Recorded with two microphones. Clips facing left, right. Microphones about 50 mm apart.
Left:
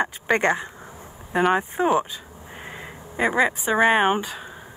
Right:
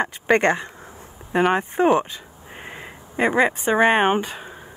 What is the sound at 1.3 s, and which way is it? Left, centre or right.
Speech, centre.